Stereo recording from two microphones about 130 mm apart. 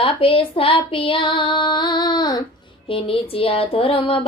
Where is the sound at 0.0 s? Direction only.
45° left (ahead or behind).